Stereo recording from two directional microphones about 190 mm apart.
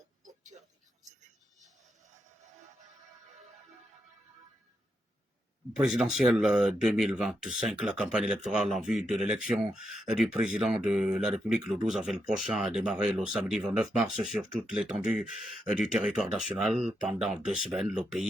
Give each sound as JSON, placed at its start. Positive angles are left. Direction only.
{"t": 0.5, "sound": "music", "side_deg": -35}
{"t": 5.7, "sound": "speech", "side_deg": -5}